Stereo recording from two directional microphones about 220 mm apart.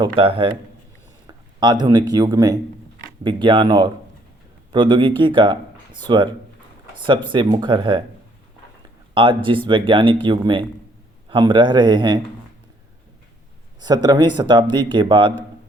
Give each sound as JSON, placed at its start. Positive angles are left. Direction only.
{"t": 0.0, "sound": "speech", "side_deg": -25}
{"t": 9.1, "sound": "speech", "side_deg": -20}
{"t": 13.7, "sound": "speech", "side_deg": -20}